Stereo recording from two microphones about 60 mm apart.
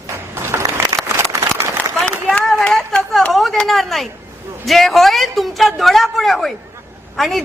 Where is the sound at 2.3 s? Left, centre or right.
Centre.